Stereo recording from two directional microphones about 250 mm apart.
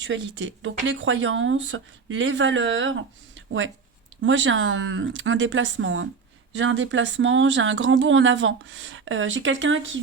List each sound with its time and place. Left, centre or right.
0.0 s speech: right
3.3 s a sound: right
4.2 s speech: right